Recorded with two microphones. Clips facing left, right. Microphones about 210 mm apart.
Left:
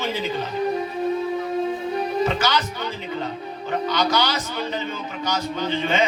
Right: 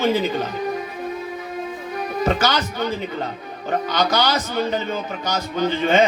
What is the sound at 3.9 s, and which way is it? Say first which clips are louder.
A man's voice: right 2 dB; 40° right (ahead or behind).